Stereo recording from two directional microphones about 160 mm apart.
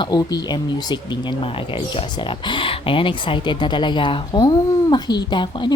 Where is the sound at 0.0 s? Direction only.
25° left (ahead or behind).